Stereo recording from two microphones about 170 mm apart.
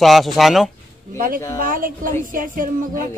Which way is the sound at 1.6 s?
55° right (ahead or behind).